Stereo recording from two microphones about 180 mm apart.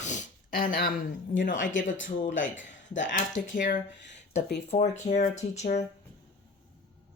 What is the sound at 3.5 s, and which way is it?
Speech, 45° left (ahead or behind).